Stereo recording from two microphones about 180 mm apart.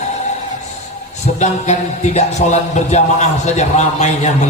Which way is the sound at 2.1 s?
40° left (ahead or behind).